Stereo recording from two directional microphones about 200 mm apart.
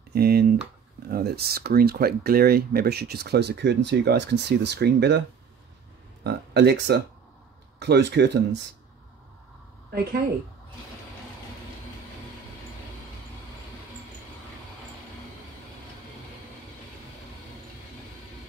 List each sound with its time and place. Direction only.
0.1 s speech: 50° right (ahead or behind)
6.2 s speech: 55° right (ahead or behind)